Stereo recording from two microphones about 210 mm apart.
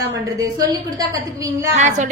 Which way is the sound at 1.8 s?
35° right (ahead or behind).